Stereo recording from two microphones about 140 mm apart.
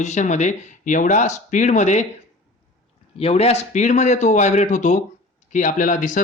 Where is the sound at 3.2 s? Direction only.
45° left (ahead or behind); by 6.2 s 70° left (ahead or behind).